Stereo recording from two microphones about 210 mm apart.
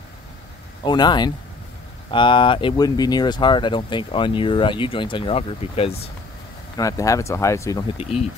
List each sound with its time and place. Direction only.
0.8 s speech: 20° left (ahead or behind)
6.8 s speech: 15° left (ahead or behind)